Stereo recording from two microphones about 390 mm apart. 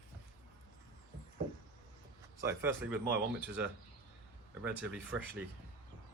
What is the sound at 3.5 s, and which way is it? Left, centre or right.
Speech, right.